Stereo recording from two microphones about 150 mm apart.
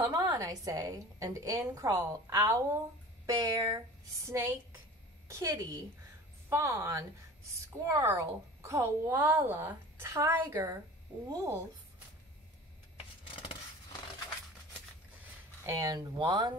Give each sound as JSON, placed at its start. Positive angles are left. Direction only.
{"t": 0.0, "sound": "a woman's voice", "side_deg": -25}
{"t": 15.6, "sound": "a woman's voice", "side_deg": -20}